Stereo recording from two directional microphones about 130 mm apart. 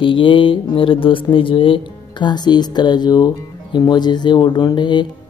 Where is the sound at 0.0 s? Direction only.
40° left (ahead or behind).